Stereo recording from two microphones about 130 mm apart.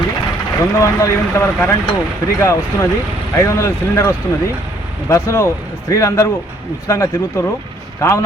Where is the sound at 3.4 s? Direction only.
20° left (ahead or behind).